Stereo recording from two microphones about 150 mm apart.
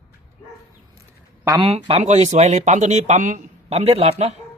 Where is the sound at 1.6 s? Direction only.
40° right (ahead or behind).